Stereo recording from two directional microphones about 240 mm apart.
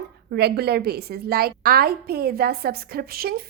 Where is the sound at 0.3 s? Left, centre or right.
Right.